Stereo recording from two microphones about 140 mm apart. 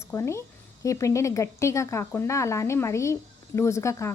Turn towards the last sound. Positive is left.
turn(degrees=20)  # may be behind; listen again after turning